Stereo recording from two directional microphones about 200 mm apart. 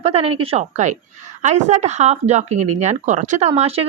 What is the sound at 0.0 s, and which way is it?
A woman's voice, 30° right (ahead or behind).